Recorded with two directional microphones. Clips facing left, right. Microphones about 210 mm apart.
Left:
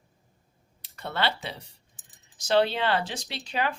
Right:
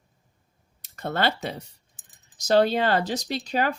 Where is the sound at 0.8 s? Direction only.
45° right (ahead or behind).